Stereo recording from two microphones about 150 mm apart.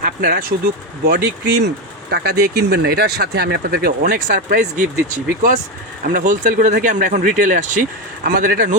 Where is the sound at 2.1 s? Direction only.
90° right; by 4.7 s 60° right (ahead or behind).